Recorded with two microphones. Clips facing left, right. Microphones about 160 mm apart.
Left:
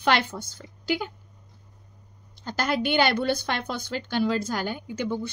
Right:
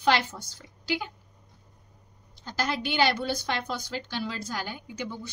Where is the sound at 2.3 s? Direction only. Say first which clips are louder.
Left 4 dB; 55° left (ahead or behind).